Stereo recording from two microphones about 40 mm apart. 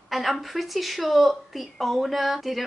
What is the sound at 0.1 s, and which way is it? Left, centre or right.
A woman's voice, centre.